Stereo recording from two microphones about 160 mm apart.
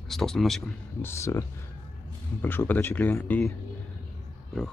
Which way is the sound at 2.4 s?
10° left (ahead or behind).